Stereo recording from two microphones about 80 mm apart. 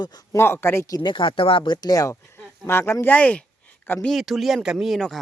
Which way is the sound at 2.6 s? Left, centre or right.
Left.